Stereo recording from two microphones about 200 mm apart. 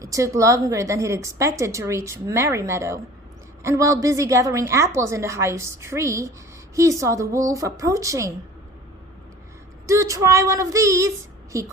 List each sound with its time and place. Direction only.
0.0 s a woman's voice: 15° right (ahead or behind)
9.8 s a woman's voice: 15° right (ahead or behind)